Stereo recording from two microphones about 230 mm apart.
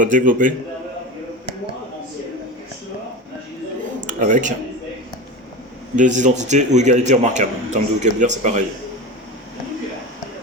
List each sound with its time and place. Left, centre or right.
0.0 s a man's voice: right
4.0 s speech: right
6.0 s a man's voice: right